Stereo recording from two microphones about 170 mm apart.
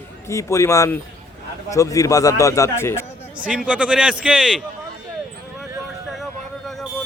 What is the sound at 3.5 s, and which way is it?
Speech, 5° right (ahead or behind).